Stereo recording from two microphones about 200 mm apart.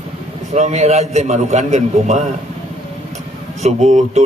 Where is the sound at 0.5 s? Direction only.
35° right (ahead or behind).